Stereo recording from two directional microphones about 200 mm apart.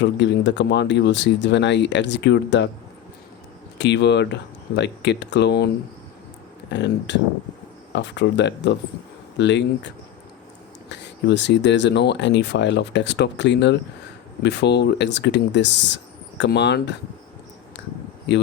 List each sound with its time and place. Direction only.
0.0 s speech: 60° left (ahead or behind)
3.8 s speech: 60° left (ahead or behind)
18.3 s speech: 60° left (ahead or behind)